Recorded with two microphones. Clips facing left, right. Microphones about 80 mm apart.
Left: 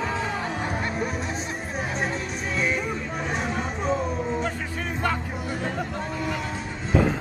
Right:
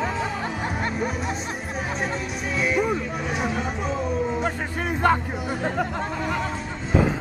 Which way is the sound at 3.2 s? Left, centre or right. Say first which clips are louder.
Even; centre.